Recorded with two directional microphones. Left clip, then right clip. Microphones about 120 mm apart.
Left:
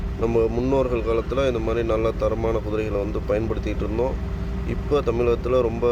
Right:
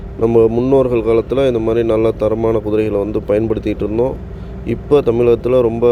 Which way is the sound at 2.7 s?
40° right (ahead or behind).